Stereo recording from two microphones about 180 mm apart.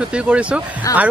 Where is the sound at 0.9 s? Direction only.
20° left (ahead or behind).